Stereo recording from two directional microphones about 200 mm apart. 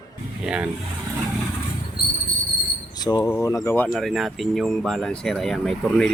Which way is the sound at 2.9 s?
20° left (ahead or behind).